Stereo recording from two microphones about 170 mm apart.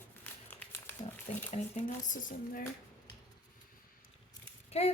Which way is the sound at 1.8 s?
50° left (ahead or behind).